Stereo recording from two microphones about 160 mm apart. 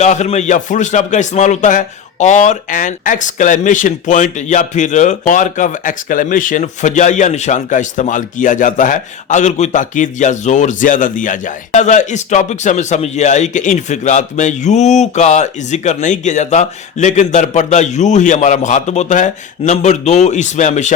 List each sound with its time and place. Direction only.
0.0 s speech: 45° left (ahead or behind)